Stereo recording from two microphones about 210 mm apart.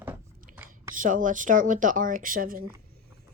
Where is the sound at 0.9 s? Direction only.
40° right (ahead or behind).